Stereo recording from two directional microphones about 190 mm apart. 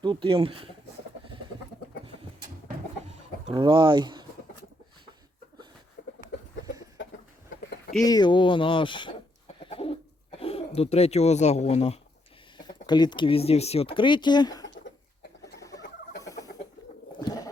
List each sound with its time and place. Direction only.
0.0 s speech: 25° right (ahead or behind)
3.5 s speech: 25° right (ahead or behind)
6.0 s a sound: 55° left (ahead or behind)
8.0 s speech: 20° left (ahead or behind)
9.6 s bird: 30° left (ahead or behind)
10.8 s speech: 35° left (ahead or behind)
12.5 s speech: 25° left (ahead or behind)
16.2 s chicken: 15° left (ahead or behind)
17.2 s goat: 20° left (ahead or behind)